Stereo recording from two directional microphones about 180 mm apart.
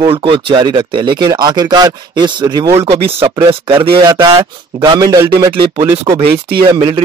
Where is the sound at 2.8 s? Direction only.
30° right (ahead or behind).